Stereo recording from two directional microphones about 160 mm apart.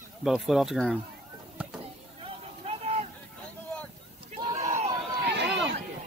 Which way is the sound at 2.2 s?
40° right (ahead or behind).